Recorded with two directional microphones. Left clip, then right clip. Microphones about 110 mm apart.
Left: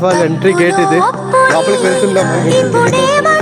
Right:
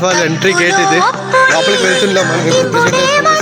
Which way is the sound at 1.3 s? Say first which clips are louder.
Even; 60° left (ahead or behind).